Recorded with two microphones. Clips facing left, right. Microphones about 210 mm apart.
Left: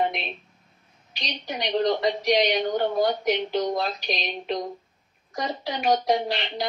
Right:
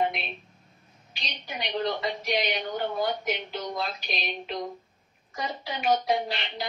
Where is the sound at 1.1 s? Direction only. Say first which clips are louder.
Left 5 dB; 40° left (ahead or behind).